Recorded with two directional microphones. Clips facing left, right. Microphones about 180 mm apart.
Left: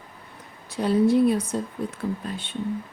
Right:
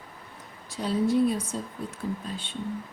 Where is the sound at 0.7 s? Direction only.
60° left (ahead or behind).